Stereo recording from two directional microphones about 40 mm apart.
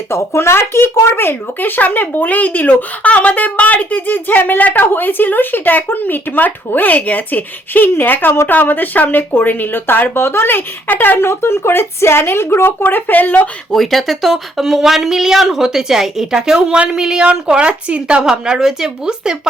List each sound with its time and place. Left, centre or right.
0.7 s a child's voice: left
11.2 s speech: left
12.8 s a child's voice: left
13.7 s speech: centre; by 18.2 s right
18.2 s speech: centre